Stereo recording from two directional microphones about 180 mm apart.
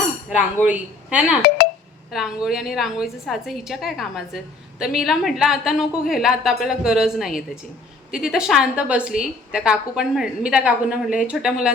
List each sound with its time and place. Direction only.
0.3 s speech: 5° right (ahead or behind)
1.4 s speech: 60° left (ahead or behind)
2.0 s a woman's voice: 5° right (ahead or behind)